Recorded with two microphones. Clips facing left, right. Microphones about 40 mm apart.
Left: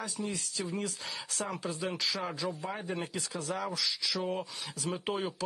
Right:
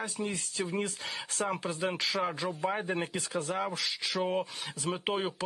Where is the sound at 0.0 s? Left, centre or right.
Right.